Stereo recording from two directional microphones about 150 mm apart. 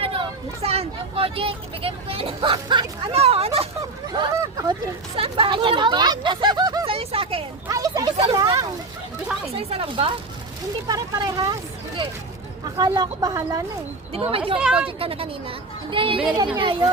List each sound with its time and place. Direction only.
0.0 s speech: 40° right (ahead or behind)
3.8 s speech: 30° right (ahead or behind)
7.7 s speech: 25° right (ahead or behind)
9.5 s speech: 40° right (ahead or behind); by 11.5 s 25° right (ahead or behind)
12.6 s speech: 25° right (ahead or behind)
14.1 s speech: 40° right (ahead or behind)
14.6 s speech: 5° right (ahead or behind)
14.8 s speech: 40° right (ahead or behind)